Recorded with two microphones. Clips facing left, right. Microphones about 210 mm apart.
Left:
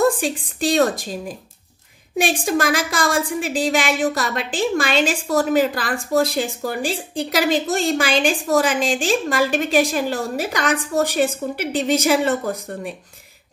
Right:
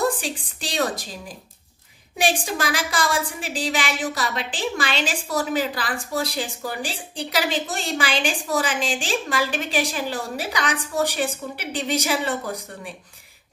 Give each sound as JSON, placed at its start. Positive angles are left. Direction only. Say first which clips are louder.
{"t": 0.0, "sound": "a woman's voice", "louder": "left 6 dB", "side_deg": 50}
{"t": 2.4, "sound": "a woman's voice", "louder": "left 6 dB", "side_deg": 50}